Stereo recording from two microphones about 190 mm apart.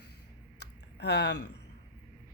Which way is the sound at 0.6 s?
60° left (ahead or behind).